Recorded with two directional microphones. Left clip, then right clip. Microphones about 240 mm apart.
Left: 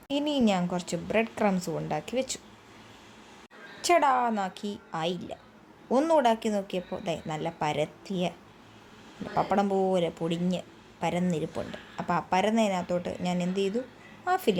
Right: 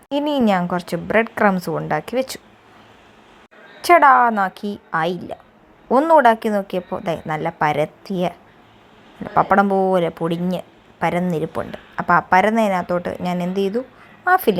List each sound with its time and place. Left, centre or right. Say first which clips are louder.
0.1 s speech: right 9 dB; centre
3.8 s speech: right 12 dB; centre
9.3 s speech: right 11 dB; centre